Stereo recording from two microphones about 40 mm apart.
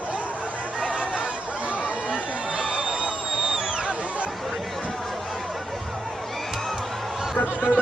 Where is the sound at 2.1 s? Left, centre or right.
Right.